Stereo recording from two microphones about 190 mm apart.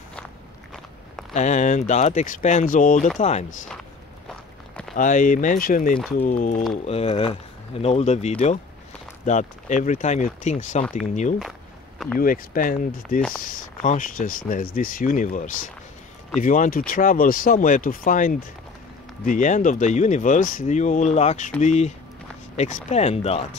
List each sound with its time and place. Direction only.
1.3 s speech: 40° left (ahead or behind)
4.9 s speech: 45° left (ahead or behind)
6.9 s speech: 30° left (ahead or behind)
12.2 s speech: 50° left (ahead or behind); by 23.4 s 30° left (ahead or behind)